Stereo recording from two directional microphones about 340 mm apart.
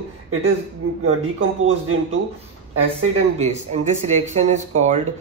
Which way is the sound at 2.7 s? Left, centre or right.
Right.